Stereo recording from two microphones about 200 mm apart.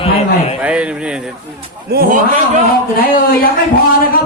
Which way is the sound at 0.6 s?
5° right (ahead or behind).